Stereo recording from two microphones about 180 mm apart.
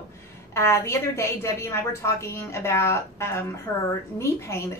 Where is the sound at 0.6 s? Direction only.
15° left (ahead or behind).